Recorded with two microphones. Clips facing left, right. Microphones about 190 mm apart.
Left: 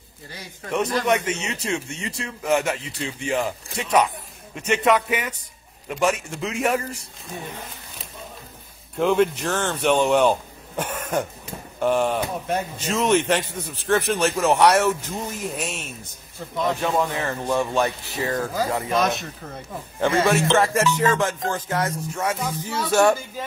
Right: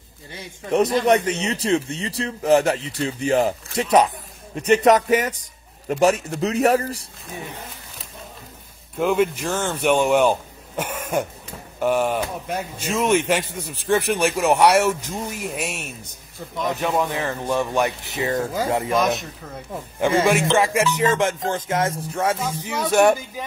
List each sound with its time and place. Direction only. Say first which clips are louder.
0.3 s music: right 5 dB; 25° right (ahead or behind)
0.9 s speech: right 4 dB; 35° right (ahead or behind)
8.9 s a man's voice: even; 5° right (ahead or behind)
17.7 s music: right 1 dB; 20° right (ahead or behind)
20.0 s music: right 1 dB; 15° right (ahead or behind)
22.7 s a man's voice: right 2 dB; 20° right (ahead or behind)